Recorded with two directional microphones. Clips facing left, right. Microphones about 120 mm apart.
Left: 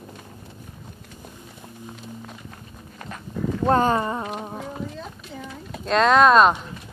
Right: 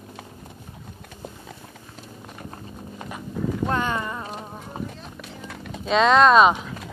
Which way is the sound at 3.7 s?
35° left (ahead or behind).